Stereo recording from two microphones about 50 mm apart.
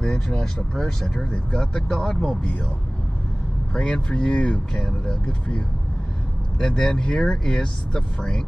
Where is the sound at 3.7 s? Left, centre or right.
Centre.